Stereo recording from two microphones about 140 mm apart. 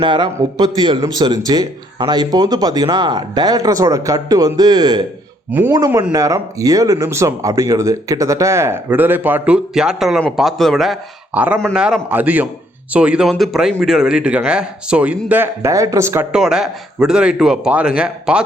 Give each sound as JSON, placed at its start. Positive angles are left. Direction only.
{"t": 0.0, "sound": "speech", "side_deg": -35}
{"t": 5.5, "sound": "speech", "side_deg": -10}
{"t": 11.3, "sound": "speech", "side_deg": -10}
{"t": 16.3, "sound": "speech", "side_deg": -5}